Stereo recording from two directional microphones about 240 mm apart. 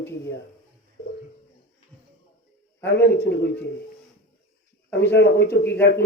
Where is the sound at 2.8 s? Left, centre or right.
Left.